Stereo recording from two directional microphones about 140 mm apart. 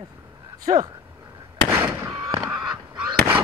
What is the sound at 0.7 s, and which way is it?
Speech, 60° right (ahead or behind).